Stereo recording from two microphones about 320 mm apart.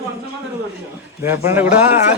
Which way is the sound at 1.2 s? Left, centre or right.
Centre.